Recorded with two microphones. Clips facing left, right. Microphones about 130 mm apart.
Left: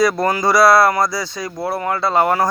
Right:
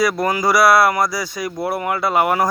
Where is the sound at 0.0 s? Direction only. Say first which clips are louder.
Left 2 dB; 10° right (ahead or behind).